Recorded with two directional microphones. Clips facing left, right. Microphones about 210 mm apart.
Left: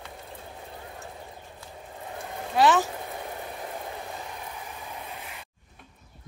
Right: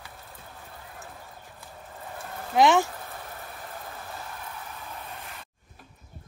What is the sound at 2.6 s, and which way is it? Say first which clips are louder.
Speech: right 1 dB; 15° right (ahead or behind).